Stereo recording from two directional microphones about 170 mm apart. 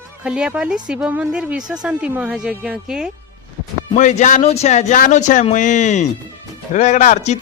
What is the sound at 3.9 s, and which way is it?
A man's voice, 45° left (ahead or behind).